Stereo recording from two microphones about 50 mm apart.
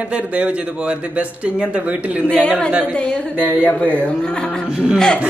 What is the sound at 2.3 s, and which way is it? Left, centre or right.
Speech, left.